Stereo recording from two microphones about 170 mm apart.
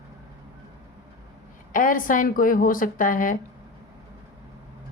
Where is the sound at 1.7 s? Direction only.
50° left (ahead or behind).